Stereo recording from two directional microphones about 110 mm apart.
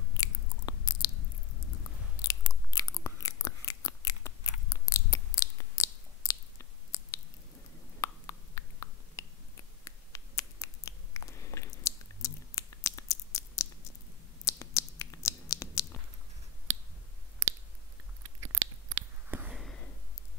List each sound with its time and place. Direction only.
0.2 s chewing: 35° left (ahead or behind)
2.2 s chewing: 30° left (ahead or behind)
6.2 s squish: 30° left (ahead or behind)
8.0 s a sound: 30° left (ahead or behind)
18.4 s chewing: 20° right (ahead or behind)
19.5 s a sound: centre (ahead or behind)